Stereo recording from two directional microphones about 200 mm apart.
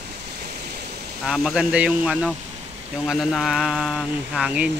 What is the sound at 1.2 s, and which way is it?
Speech, 5° right (ahead or behind).